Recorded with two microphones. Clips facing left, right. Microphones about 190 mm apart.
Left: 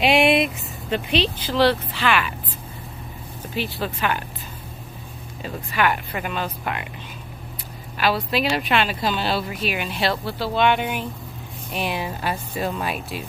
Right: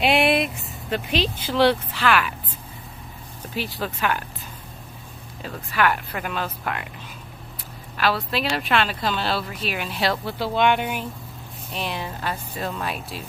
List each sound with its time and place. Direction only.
0.0 s speech: centre (ahead or behind)
3.5 s speech: 40° right (ahead or behind)
5.4 s speech: 5° left (ahead or behind)
8.0 s speech: 5° left (ahead or behind)
10.4 s speech: 15° right (ahead or behind)
10.8 s speech: 10° left (ahead or behind)